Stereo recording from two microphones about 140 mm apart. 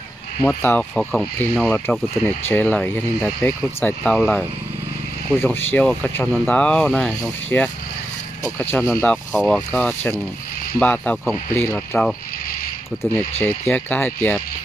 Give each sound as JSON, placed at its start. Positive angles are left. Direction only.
{"t": 0.4, "sound": "speech", "side_deg": 10}
{"t": 5.4, "sound": "speech", "side_deg": 15}
{"t": 13.4, "sound": "speech", "side_deg": 10}